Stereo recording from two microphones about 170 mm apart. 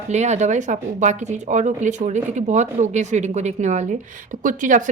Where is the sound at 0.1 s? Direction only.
40° right (ahead or behind).